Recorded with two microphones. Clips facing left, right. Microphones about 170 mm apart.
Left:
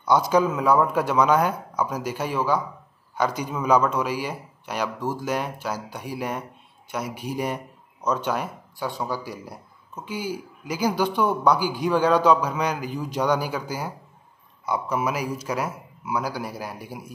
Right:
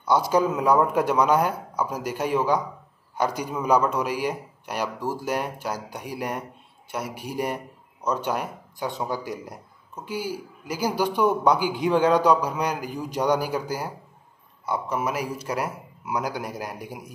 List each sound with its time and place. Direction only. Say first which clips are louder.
0.0 s a man's voice: left 1 dB; 5° right (ahead or behind)
14.7 s a man's voice: left 1 dB; centre (ahead or behind)
15.6 s a man's voice: even; 20° right (ahead or behind)